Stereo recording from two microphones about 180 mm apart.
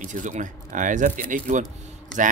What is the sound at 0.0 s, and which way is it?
Speech, 45° right (ahead or behind).